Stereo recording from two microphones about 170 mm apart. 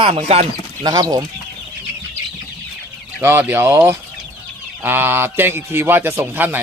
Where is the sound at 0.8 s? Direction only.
20° right (ahead or behind).